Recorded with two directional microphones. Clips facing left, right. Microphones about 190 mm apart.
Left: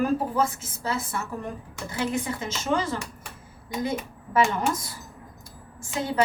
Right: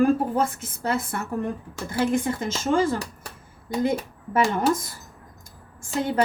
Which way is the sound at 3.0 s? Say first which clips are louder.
Right 3 dB; 35° right (ahead or behind).